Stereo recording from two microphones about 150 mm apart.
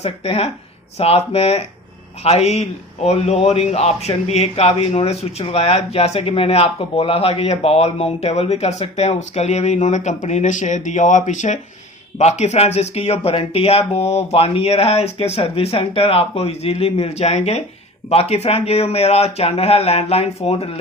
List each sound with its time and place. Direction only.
0.0 s a man's voice: 40° left (ahead or behind)